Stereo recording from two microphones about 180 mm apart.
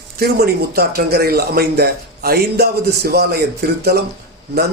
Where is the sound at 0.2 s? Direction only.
60° right (ahead or behind).